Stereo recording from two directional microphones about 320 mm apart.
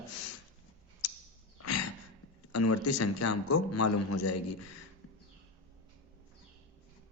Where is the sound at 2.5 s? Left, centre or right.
Left.